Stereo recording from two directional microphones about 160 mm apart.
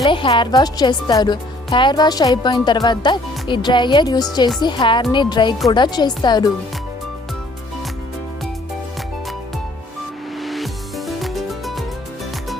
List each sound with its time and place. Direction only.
0.0 s speech: 30° left (ahead or behind)
10.4 s music: centre (ahead or behind)